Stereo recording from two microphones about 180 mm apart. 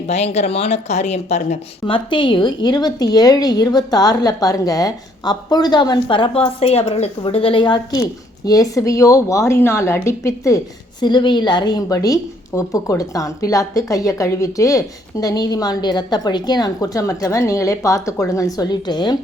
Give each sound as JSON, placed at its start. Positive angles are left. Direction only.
{"t": 0.1, "sound": "a woman's voice", "side_deg": 35}